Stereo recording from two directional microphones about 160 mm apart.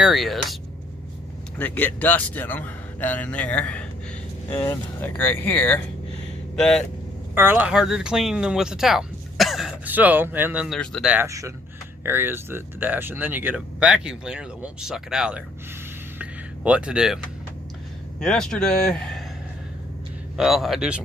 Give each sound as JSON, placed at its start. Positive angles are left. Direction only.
{"t": 0.0, "sound": "speech", "side_deg": 0}
{"t": 1.5, "sound": "a man's voice", "side_deg": 10}
{"t": 4.5, "sound": "speech", "side_deg": 20}
{"t": 5.0, "sound": "a man's voice", "side_deg": 10}
{"t": 7.3, "sound": "speech", "side_deg": -15}
{"t": 10.8, "sound": "speech", "side_deg": 5}
{"t": 11.1, "sound": "speech", "side_deg": -15}
{"t": 16.1, "sound": "a sound", "side_deg": -10}
{"t": 18.2, "sound": "speech", "side_deg": 5}
{"t": 20.3, "sound": "speech", "side_deg": 0}